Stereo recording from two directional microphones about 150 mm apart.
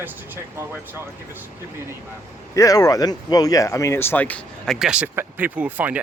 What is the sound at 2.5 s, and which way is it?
Speech, 25° left (ahead or behind).